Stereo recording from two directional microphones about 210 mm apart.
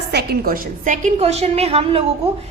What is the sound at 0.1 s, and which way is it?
A woman's voice, 50° right (ahead or behind).